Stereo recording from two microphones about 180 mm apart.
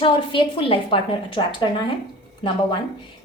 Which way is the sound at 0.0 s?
25° left (ahead or behind).